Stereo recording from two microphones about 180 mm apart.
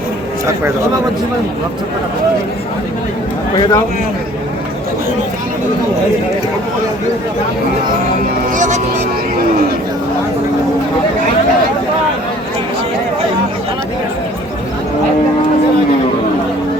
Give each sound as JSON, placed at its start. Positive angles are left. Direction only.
{"t": 3.6, "sound": "speech", "side_deg": 20}
{"t": 8.5, "sound": "speech", "side_deg": -40}